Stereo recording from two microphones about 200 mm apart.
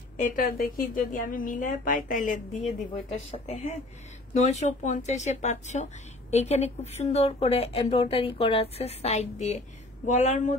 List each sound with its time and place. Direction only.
0.2 s a woman's voice: 45° left (ahead or behind)